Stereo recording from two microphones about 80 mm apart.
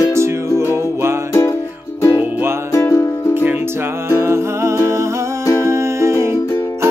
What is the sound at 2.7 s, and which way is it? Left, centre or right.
Music, left.